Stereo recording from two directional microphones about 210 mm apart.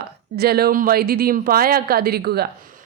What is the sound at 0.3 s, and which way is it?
A woman's voice, 45° right (ahead or behind).